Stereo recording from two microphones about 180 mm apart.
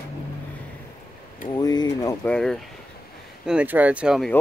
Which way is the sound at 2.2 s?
5° left (ahead or behind).